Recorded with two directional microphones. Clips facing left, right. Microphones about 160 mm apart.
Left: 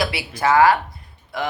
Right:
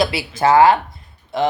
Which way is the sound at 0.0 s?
25° right (ahead or behind).